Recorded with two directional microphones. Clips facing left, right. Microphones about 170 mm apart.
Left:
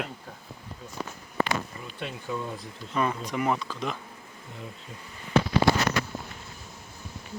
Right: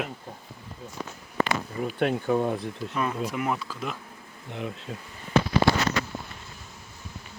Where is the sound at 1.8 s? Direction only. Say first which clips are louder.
Right 11 dB; 60° right (ahead or behind).